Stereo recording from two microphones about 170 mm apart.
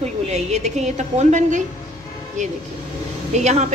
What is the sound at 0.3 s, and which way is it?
A woman's voice, 45° right (ahead or behind).